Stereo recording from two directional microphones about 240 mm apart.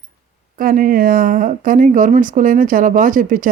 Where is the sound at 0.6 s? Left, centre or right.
Right.